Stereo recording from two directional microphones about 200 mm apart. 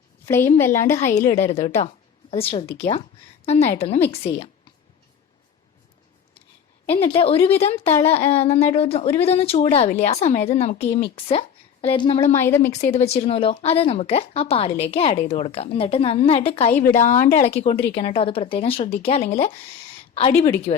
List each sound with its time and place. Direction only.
0.3 s a woman's voice: 10° left (ahead or behind)
0.9 s a woman's voice: 35° left (ahead or behind)
6.9 s a woman's voice: 30° left (ahead or behind)
12.2 s a woman's voice: 10° left (ahead or behind)
12.7 s a woman's voice: 35° left (ahead or behind)